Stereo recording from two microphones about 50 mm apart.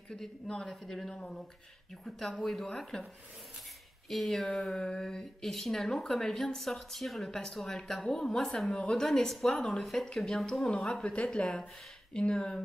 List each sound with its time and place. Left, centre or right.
0.1 s speech: centre
4.1 s speech: centre
10.9 s speech: left